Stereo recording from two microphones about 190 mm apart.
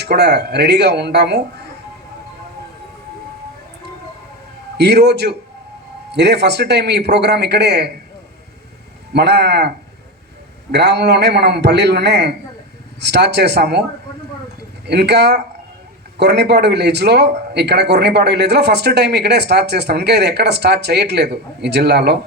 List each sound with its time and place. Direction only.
0.0 s a man's voice: 60° right (ahead or behind)
4.8 s a man's voice: 60° right (ahead or behind)
9.1 s a man's voice: 60° right (ahead or behind)
14.8 s a man's voice: 60° right (ahead or behind)